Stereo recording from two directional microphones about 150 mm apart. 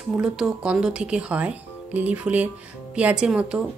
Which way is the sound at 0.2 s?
5° right (ahead or behind).